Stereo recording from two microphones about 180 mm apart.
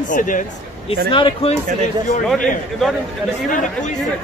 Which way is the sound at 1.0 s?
30° left (ahead or behind).